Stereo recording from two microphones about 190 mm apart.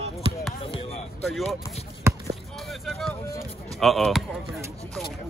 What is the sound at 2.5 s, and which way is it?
Vehicle, centre (ahead or behind).